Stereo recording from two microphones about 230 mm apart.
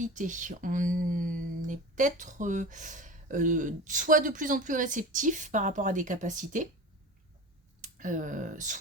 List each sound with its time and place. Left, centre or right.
0.0 s speech: right
7.8 s speech: right